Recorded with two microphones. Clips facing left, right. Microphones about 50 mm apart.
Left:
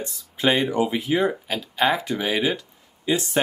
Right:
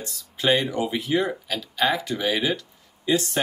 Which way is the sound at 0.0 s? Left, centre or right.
Centre.